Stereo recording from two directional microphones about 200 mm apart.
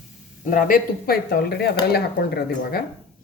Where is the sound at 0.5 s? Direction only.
45° left (ahead or behind).